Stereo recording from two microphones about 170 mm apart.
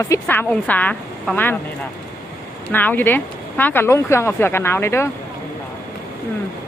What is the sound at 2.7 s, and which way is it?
A woman's voice, 10° left (ahead or behind).